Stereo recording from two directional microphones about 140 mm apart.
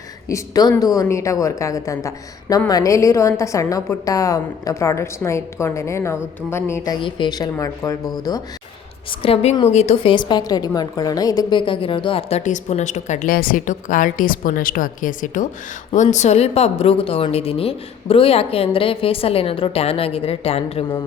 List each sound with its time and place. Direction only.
0.3 s a woman's voice: 25° left (ahead or behind)
9.2 s a woman's voice: 45° left (ahead or behind)
12.5 s a woman's voice: 55° left (ahead or behind)
16.0 s a woman's voice: 55° left (ahead or behind)